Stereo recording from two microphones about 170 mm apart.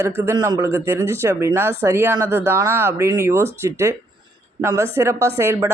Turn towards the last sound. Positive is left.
turn(degrees=-15)  # may be behind; listen again after turning